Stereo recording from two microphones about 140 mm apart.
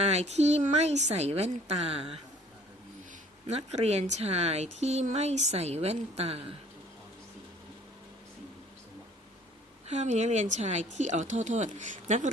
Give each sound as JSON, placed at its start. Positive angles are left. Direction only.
{"t": 0.0, "sound": "speech", "side_deg": -50}
{"t": 3.4, "sound": "speech", "side_deg": -50}
{"t": 9.8, "sound": "speech", "side_deg": -55}